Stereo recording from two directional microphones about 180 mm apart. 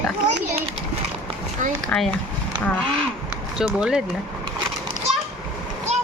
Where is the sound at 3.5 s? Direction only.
5° right (ahead or behind).